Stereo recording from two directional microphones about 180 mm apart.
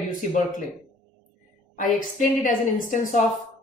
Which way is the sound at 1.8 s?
45° left (ahead or behind).